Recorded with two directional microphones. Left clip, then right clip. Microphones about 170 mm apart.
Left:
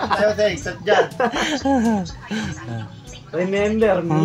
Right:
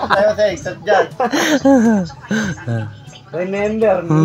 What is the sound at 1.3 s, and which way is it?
Speech, 35° right (ahead or behind).